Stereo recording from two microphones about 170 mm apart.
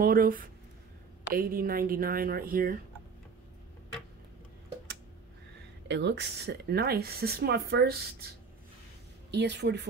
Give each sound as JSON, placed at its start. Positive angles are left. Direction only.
{"t": 0.0, "sound": "a woman's voice", "side_deg": -60}
{"t": 5.9, "sound": "speech", "side_deg": -85}
{"t": 9.3, "sound": "speech", "side_deg": -90}